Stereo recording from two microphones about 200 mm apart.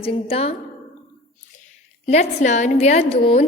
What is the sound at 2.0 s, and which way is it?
A woman's voice, 35° left (ahead or behind).